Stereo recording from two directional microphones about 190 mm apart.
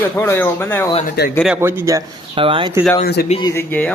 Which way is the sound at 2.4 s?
25° right (ahead or behind).